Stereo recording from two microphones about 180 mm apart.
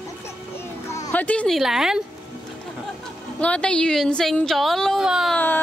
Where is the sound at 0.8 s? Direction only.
15° left (ahead or behind); by 2.0 s 5° right (ahead or behind).